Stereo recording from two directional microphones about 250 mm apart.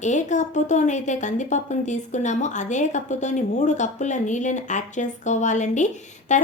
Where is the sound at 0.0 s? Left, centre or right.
Left.